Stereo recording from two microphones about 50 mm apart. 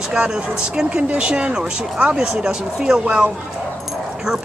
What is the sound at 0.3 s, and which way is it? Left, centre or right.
Speech, centre.